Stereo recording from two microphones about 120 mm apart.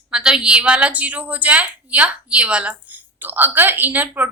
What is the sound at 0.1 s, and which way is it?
A woman's voice, 5° right (ahead or behind).